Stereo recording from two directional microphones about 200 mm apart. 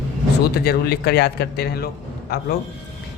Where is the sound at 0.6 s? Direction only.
50° left (ahead or behind).